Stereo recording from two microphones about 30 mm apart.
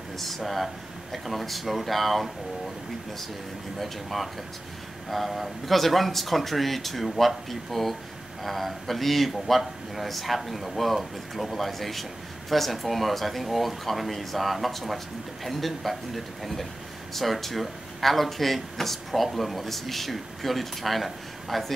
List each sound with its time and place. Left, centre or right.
0.2 s speech: centre
3.8 s speech: centre